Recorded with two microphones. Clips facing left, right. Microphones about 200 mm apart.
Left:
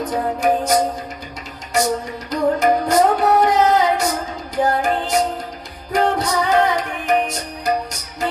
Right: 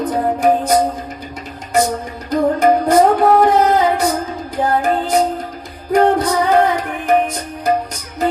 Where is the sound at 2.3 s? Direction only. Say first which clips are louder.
Right 3 dB; 55° right (ahead or behind).